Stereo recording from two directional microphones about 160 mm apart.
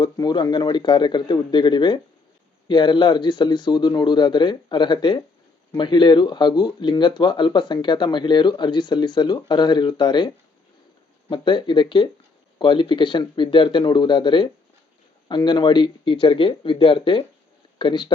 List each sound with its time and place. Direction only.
0.0 s speech: 25° left (ahead or behind)